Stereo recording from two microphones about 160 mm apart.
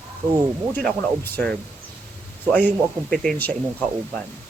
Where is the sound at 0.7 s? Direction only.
10° left (ahead or behind).